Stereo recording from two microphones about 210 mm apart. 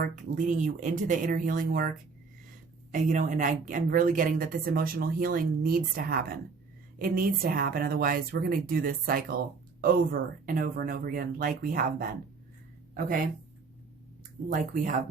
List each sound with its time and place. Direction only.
0.0 s a woman's voice: 40° right (ahead or behind)
2.9 s a woman's voice: 35° right (ahead or behind)
14.5 s a woman's voice: 40° right (ahead or behind)